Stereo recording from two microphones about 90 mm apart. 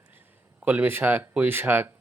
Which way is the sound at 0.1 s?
20° right (ahead or behind).